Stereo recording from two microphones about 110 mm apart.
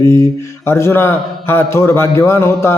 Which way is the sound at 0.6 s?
25° left (ahead or behind).